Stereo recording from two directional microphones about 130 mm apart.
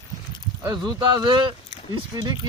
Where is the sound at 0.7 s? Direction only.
35° right (ahead or behind).